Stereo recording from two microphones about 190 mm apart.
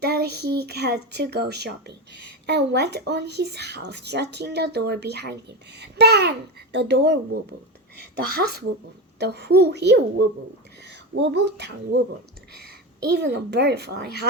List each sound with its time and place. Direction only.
0.0 s a woman's voice: 60° right (ahead or behind)